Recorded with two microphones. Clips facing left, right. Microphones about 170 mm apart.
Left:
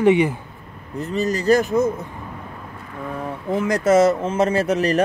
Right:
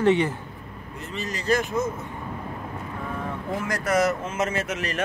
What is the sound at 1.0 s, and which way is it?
Speech, 40° left (ahead or behind).